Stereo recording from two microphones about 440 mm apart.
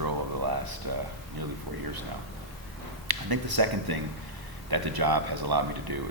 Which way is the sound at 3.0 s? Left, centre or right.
Right.